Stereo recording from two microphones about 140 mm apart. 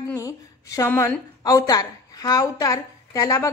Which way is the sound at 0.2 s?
25° left (ahead or behind).